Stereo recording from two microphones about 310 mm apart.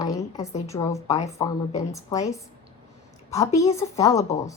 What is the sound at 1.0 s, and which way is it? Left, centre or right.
Speech, left.